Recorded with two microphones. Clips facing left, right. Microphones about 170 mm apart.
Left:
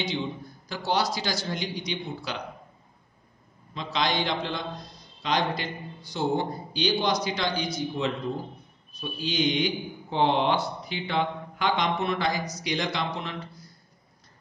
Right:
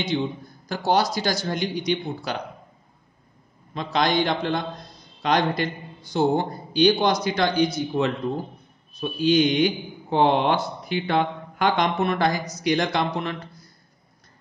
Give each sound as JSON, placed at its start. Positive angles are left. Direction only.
{"t": 0.7, "sound": "speech", "side_deg": -50}
{"t": 3.7, "sound": "a man's voice", "side_deg": -50}